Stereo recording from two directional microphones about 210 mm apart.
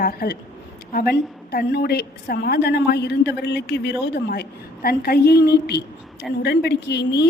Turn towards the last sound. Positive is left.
turn(degrees=55)  # may be behind; listen again after turning